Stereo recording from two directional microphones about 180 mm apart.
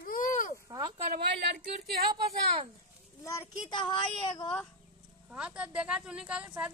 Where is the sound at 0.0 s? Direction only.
50° left (ahead or behind).